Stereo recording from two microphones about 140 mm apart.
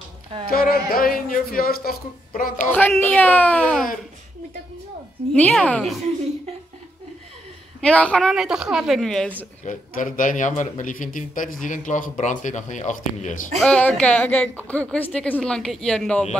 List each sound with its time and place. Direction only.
0.5 s speech: 90° left
2.6 s a woman's voice: 10° left (ahead or behind)
5.3 s a woman's voice: 10° left (ahead or behind)
7.8 s a woman's voice: 10° left (ahead or behind)
9.7 s a man's voice: 70° left (ahead or behind)
13.6 s a woman's voice: 10° left (ahead or behind)